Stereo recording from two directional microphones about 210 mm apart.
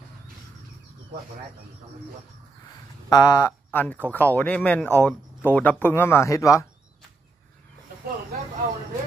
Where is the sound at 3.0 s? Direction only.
15° left (ahead or behind).